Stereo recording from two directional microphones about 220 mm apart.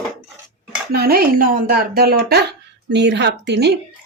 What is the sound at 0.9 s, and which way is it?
Speech, 45° right (ahead or behind).